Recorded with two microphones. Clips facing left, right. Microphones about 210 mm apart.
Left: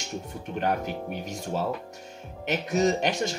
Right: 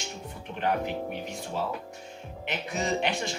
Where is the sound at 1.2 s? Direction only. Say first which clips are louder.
Left 3 dB; 40° left (ahead or behind).